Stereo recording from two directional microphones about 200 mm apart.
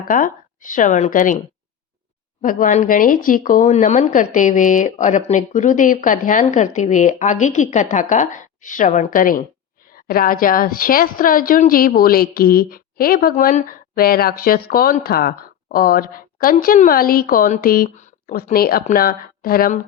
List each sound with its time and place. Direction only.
0.1 s speech: 40° left (ahead or behind)
2.4 s a woman's voice: 40° left (ahead or behind)